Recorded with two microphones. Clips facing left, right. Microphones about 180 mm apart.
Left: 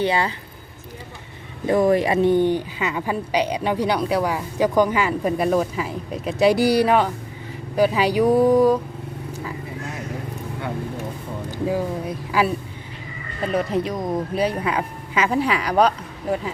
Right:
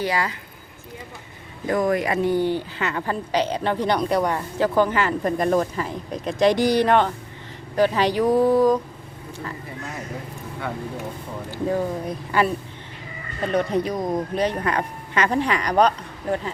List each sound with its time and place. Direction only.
0.0 s speech: 25° left (ahead or behind)
1.6 s speech: 25° left (ahead or behind); by 8.8 s 10° left (ahead or behind)
11.5 s speech: 10° left (ahead or behind)